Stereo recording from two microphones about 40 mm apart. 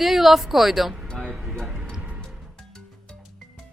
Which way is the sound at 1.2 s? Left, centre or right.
Right.